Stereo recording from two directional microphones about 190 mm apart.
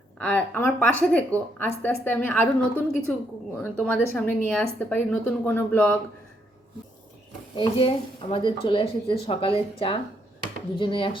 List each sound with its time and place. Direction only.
0.2 s a woman's voice: 10° left (ahead or behind)
7.5 s speech: 25° left (ahead or behind)